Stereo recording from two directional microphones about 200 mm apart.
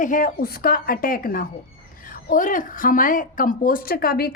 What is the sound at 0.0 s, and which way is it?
A woman's voice, 40° left (ahead or behind).